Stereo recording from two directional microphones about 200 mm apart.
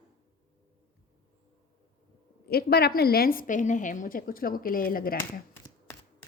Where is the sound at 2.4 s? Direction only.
50° left (ahead or behind).